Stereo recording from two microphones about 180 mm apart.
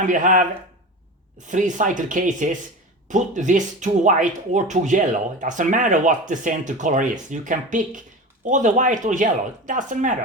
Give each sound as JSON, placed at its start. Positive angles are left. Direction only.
{"t": 0.1, "sound": "speech", "side_deg": -45}
{"t": 1.5, "sound": "speech", "side_deg": -45}